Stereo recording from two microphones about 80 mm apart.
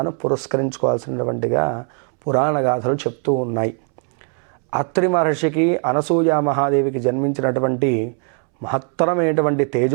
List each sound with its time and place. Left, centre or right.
0.0 s speech: right